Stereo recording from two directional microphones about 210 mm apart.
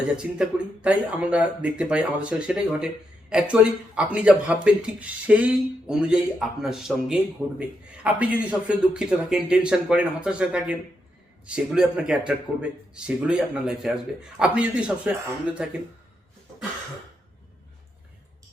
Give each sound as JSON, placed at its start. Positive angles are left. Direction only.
{"t": 0.2, "sound": "speech", "side_deg": -5}
{"t": 7.4, "sound": "a man's voice", "side_deg": -15}